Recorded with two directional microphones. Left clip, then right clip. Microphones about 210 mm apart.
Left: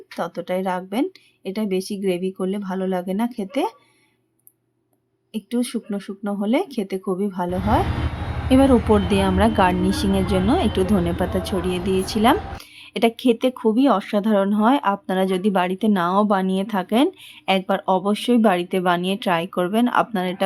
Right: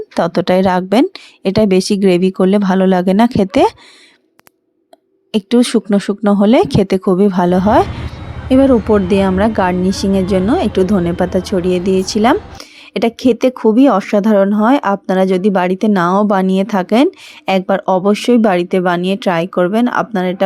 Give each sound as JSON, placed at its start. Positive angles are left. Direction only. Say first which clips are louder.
{"t": 0.2, "sound": "speech", "louder": "right 12 dB", "side_deg": -40}
{"t": 5.3, "sound": "speech", "louder": "right 13 dB", "side_deg": -40}
{"t": 8.4, "sound": "a woman's voice", "louder": "right 6 dB", "side_deg": -15}